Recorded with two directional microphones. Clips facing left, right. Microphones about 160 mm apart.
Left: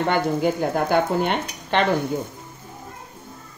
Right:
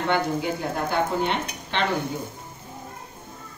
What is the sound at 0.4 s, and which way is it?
Speech, 50° left (ahead or behind).